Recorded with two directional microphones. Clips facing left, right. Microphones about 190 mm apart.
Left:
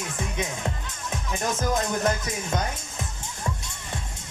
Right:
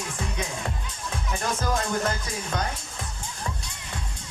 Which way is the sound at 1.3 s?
20° left (ahead or behind).